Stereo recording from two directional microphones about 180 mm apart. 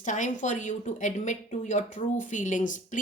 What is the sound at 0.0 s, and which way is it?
A woman's voice, 45° left (ahead or behind).